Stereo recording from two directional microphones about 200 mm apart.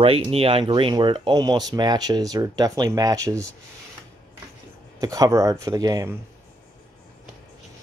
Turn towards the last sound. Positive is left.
turn(degrees=-20)  # may be behind; listen again after turning